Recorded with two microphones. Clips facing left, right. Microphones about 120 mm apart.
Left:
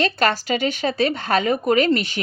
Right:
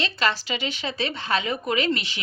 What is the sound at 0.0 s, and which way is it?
Speech, 50° left (ahead or behind).